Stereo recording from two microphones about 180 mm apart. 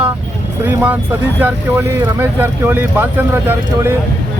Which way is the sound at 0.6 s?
15° right (ahead or behind).